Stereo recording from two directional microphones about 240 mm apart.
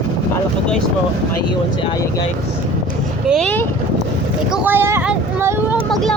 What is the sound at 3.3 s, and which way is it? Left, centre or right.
Boat, centre.